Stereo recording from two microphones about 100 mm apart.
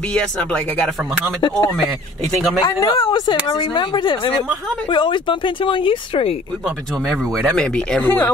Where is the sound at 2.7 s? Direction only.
35° left (ahead or behind).